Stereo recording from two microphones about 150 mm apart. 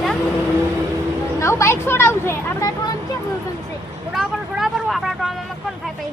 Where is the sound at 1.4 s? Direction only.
20° left (ahead or behind).